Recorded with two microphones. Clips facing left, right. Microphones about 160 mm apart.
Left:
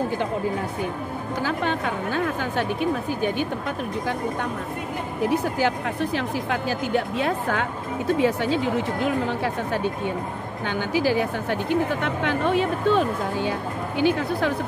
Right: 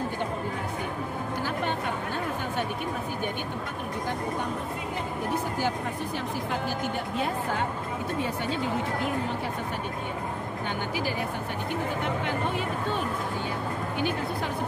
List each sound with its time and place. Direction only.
1.4 s a sound: 90° left
5.3 s speech: 85° left
10.9 s speech: 90° left